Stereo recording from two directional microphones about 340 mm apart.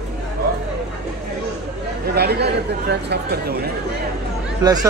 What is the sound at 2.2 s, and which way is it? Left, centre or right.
Speech, right.